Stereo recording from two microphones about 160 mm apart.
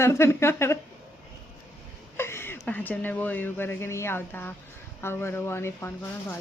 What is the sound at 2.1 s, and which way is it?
A woman's voice, 15° left (ahead or behind).